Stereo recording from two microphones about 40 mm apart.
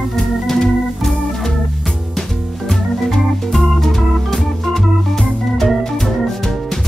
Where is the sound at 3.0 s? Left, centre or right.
Centre.